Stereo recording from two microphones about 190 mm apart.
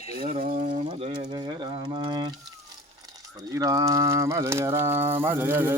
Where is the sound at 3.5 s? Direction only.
20° right (ahead or behind).